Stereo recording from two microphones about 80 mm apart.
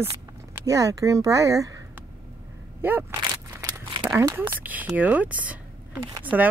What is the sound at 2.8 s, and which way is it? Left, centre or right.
Speech, right.